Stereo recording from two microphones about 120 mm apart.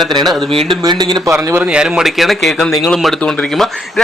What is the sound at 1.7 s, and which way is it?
Speech, 5° right (ahead or behind).